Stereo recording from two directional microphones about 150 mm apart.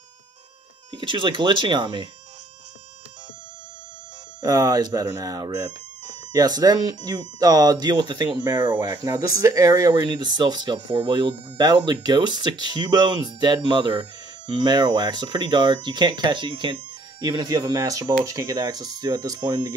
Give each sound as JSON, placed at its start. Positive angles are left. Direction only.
{"t": 0.9, "sound": "speech", "side_deg": -30}
{"t": 4.4, "sound": "speech", "side_deg": -25}